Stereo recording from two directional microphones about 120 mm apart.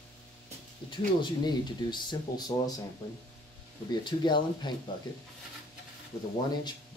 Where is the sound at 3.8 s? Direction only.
40° left (ahead or behind).